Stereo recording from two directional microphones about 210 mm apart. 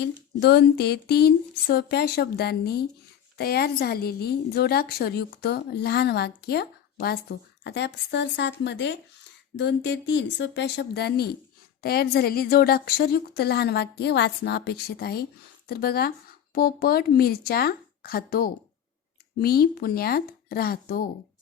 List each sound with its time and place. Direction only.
0.0 s a woman's voice: 55° left (ahead or behind)